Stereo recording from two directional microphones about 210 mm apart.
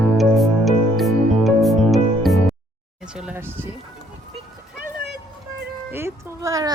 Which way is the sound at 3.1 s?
5° right (ahead or behind).